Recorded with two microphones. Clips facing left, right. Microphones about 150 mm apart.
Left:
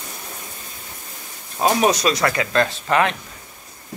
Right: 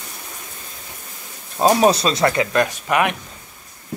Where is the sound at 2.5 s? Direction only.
15° right (ahead or behind).